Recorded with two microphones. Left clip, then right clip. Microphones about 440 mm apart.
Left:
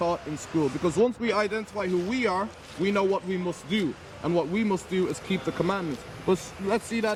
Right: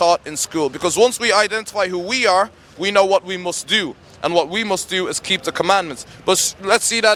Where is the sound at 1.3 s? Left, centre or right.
Right.